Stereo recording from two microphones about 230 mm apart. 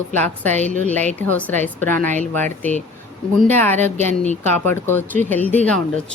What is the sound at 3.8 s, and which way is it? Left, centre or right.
Speech, right.